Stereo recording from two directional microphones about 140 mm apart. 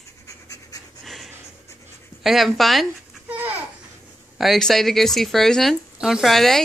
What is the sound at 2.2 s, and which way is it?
Speech, centre (ahead or behind).